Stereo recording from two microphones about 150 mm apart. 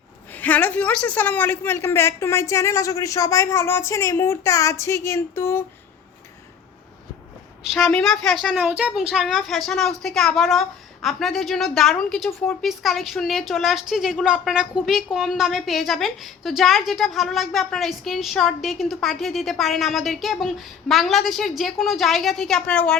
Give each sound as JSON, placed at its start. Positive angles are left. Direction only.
{"t": 0.3, "sound": "a woman's voice", "side_deg": 10}
{"t": 7.7, "sound": "speech", "side_deg": 5}
{"t": 8.5, "sound": "speech", "side_deg": -10}